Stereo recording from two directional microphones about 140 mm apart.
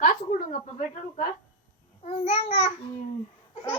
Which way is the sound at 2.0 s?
50° left (ahead or behind).